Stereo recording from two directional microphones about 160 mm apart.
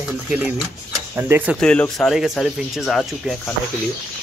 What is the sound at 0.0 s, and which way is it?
Typewriter, 5° right (ahead or behind).